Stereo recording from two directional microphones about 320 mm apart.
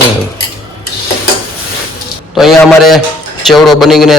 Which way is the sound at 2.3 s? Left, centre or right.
Centre.